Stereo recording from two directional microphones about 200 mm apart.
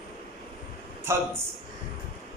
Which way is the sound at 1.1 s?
10° right (ahead or behind).